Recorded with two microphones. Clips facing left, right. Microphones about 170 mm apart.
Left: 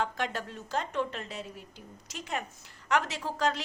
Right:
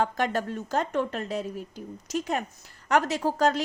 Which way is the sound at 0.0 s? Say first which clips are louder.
Right 6 dB; 45° right (ahead or behind).